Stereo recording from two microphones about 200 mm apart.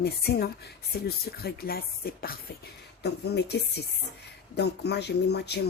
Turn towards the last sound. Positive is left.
turn(degrees=55)  # may be behind; listen again after turning